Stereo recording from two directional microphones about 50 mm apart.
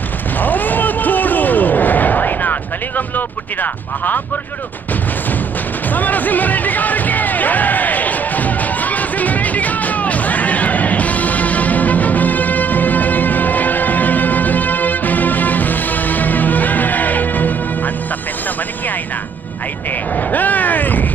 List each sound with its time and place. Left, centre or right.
0.4 s a sound: left
3.2 s speech: left
5.9 s music: left
20.2 s speech: left